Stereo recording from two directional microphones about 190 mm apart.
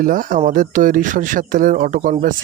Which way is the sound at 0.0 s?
45° right (ahead or behind).